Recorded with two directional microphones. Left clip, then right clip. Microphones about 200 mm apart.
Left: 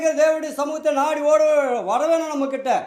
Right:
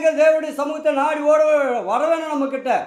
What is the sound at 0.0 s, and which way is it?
A man's voice, 40° left (ahead or behind).